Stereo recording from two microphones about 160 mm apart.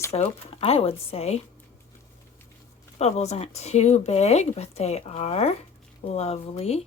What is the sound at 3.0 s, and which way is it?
Speech, 45° left (ahead or behind).